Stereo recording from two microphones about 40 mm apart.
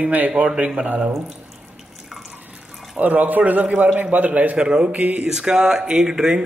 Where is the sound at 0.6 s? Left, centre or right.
Right.